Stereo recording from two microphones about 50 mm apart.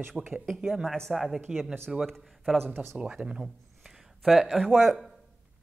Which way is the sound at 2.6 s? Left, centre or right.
Right.